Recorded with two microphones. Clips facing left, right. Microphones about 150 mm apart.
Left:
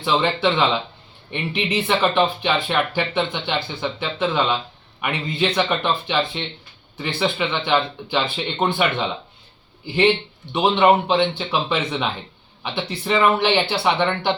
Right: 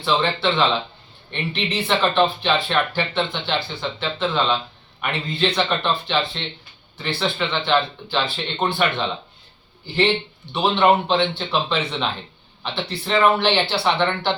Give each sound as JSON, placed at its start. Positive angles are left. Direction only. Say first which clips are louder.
{"t": 0.0, "sound": "a man's voice", "louder": "left 1 dB", "side_deg": 15}
{"t": 13.1, "sound": "speech", "louder": "even", "side_deg": 10}